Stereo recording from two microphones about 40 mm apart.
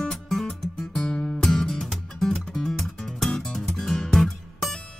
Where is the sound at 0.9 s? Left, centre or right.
Left.